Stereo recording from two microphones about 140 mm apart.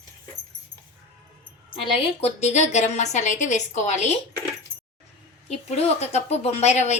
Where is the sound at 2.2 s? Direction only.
50° left (ahead or behind).